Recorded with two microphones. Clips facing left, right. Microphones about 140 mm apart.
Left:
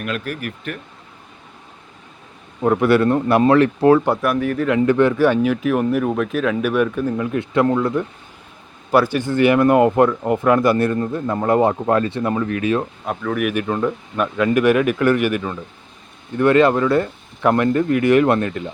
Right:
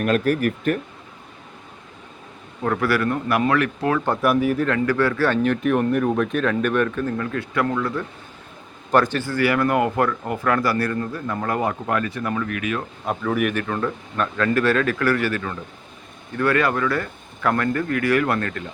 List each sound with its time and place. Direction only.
0.0 s speech: 40° right (ahead or behind)
2.6 s speech: 20° left (ahead or behind)
4.2 s speech: 5° right (ahead or behind)
4.9 s speech: 20° left (ahead or behind)
8.9 s speech: 10° left (ahead or behind); by 12.8 s 30° left (ahead or behind)
13.1 s speech: centre (ahead or behind)
13.5 s speech: 15° left (ahead or behind)